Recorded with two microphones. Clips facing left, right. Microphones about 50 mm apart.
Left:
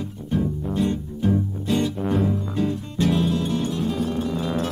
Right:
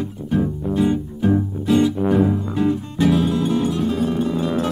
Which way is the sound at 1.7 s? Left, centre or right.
Centre.